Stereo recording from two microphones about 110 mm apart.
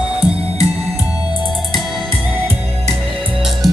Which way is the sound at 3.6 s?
Centre (ahead or behind).